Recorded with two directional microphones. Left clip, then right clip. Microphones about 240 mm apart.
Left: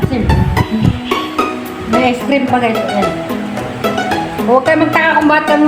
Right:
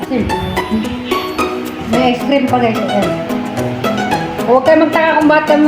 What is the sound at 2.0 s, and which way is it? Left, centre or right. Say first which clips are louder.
Speech: even; centre.